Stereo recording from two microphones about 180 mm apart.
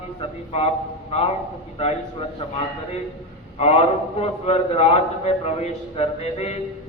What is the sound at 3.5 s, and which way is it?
A man's voice, 35° left (ahead or behind).